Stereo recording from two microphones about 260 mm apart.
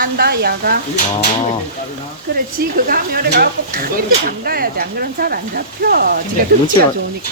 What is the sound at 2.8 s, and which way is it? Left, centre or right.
Speech, right.